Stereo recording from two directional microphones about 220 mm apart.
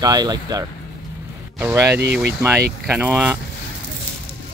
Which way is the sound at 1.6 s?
15° right (ahead or behind).